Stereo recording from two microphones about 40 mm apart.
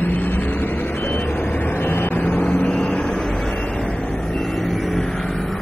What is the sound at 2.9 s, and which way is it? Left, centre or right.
Vehicle, centre.